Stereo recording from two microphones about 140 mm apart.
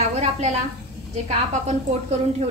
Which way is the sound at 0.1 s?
55° right (ahead or behind).